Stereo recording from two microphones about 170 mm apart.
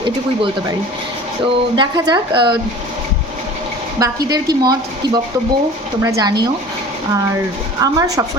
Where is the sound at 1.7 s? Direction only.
25° right (ahead or behind).